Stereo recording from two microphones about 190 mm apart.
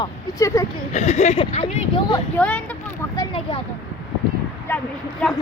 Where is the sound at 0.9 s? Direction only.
40° left (ahead or behind).